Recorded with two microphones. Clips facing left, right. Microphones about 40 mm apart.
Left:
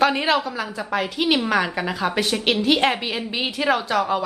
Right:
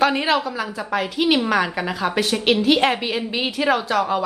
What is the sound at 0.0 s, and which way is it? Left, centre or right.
Speech, centre.